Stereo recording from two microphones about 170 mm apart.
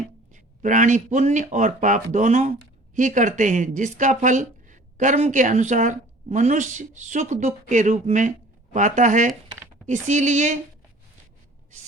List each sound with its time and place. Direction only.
0.3 s speech: 50° right (ahead or behind)